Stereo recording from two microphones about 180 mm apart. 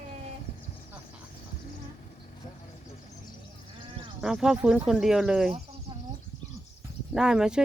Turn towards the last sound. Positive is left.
turn(degrees=-5)  # may be behind; listen again after turning